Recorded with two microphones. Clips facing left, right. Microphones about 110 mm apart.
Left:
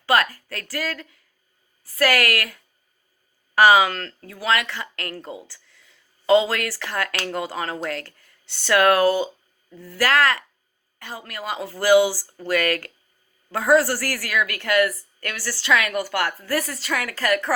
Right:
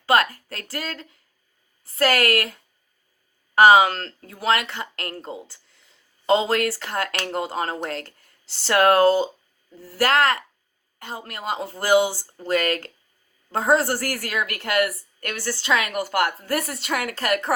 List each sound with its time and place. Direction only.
0.0 s a woman's voice: 30° right (ahead or behind)